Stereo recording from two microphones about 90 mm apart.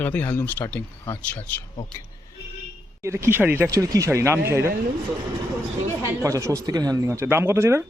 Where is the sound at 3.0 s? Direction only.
30° right (ahead or behind).